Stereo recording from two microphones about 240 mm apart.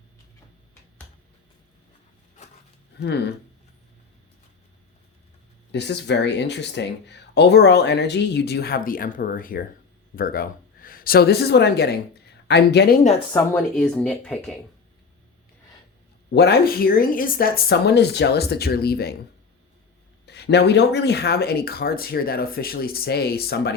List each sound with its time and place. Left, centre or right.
3.0 s speech: left
5.7 s speech: left
13.3 s speech: centre
16.3 s speech: left
20.2 s speech: left